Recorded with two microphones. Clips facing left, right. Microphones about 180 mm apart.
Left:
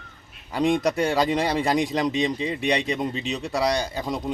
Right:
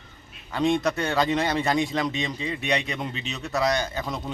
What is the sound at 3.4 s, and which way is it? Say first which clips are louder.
Speech: even; 15° left (ahead or behind).